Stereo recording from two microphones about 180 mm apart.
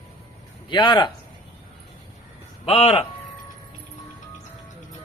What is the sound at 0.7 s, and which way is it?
Speech, 25° left (ahead or behind).